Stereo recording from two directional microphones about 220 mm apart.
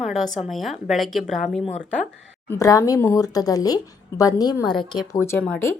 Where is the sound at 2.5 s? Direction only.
15° left (ahead or behind).